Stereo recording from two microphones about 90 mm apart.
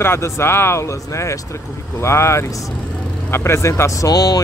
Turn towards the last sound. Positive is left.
turn(degrees=45)  # may be behind; listen again after turning